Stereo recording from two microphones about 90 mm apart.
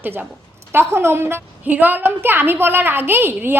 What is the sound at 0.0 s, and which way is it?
A woman's voice, 20° right (ahead or behind).